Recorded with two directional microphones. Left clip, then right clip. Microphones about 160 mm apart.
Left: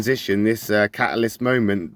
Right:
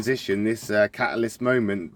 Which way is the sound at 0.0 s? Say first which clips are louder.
Left 4 dB; 45° left (ahead or behind).